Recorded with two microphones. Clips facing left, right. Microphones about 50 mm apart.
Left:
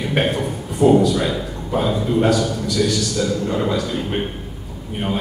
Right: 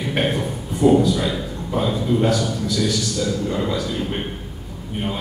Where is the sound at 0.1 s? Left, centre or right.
Centre; by 3.5 s left.